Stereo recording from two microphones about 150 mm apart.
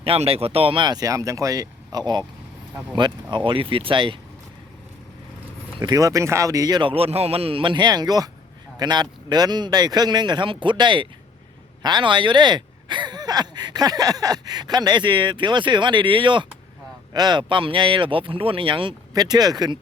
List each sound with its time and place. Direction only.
0.0 s speech: 40° right (ahead or behind)
5.8 s speech: 25° right (ahead or behind)